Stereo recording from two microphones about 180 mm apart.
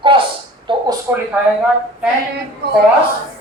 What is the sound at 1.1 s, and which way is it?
Speech, 15° right (ahead or behind).